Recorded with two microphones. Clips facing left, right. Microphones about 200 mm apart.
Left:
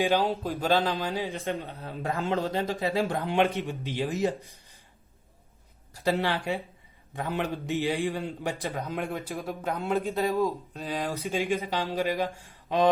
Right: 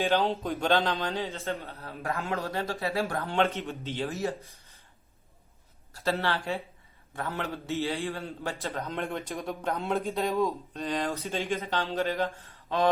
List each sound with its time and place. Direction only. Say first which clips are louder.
0.0 s speech: left 1 dB; 15° left (ahead or behind)
0.3 s speech: left 1 dB; centre (ahead or behind)
5.9 s speech: left 2 dB; 15° left (ahead or behind)
9.0 s speech: left 1 dB; centre (ahead or behind)